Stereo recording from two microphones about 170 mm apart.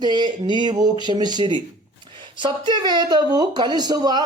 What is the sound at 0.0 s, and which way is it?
Speech, 25° right (ahead or behind).